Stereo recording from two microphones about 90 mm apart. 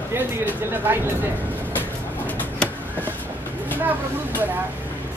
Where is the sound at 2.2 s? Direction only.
20° left (ahead or behind).